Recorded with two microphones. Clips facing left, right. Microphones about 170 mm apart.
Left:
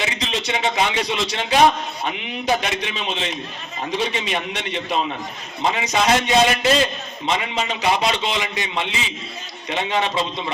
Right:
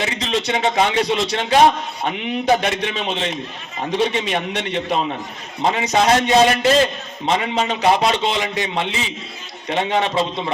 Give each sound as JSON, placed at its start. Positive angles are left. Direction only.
{"t": 0.0, "sound": "a man's voice", "side_deg": -50}